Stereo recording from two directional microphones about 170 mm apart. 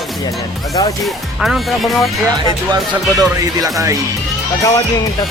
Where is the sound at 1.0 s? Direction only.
Centre (ahead or behind).